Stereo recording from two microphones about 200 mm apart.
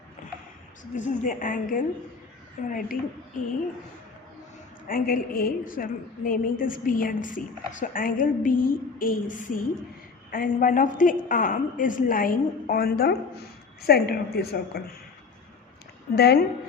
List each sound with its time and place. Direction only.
0.2 s a sound: 40° left (ahead or behind)
0.9 s a woman's voice: 40° left (ahead or behind)
4.9 s a woman's voice: 45° left (ahead or behind)
16.1 s a woman's voice: 55° left (ahead or behind)